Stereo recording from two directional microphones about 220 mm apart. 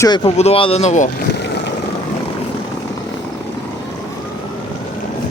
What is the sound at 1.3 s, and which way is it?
Vehicle, 50° left (ahead or behind).